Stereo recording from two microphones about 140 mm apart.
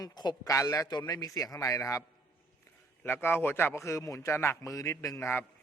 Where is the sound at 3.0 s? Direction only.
15° left (ahead or behind).